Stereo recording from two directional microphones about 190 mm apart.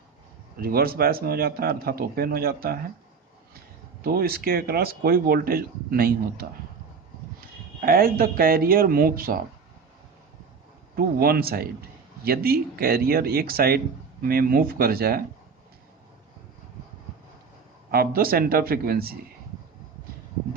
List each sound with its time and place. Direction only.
0.6 s speech: 50° right (ahead or behind)
4.0 s speech: 55° right (ahead or behind)
7.8 s speech: 50° right (ahead or behind)
10.9 s speech: 55° right (ahead or behind)
17.9 s speech: 50° right (ahead or behind)